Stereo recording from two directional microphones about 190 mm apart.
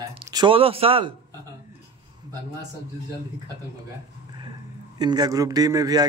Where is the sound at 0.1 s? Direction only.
25° right (ahead or behind).